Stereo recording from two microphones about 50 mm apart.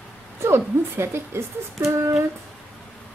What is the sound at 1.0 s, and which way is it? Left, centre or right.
Speech, right.